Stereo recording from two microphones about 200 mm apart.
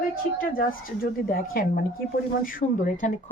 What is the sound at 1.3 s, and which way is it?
Speech, 50° left (ahead or behind).